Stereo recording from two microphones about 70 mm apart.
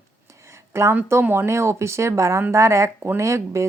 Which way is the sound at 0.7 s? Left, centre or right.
Right.